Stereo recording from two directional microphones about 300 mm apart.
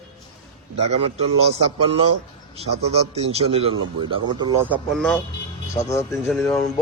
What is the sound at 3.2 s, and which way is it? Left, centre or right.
Speech, centre.